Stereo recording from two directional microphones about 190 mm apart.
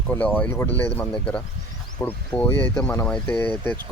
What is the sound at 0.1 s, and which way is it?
Speech, 10° left (ahead or behind).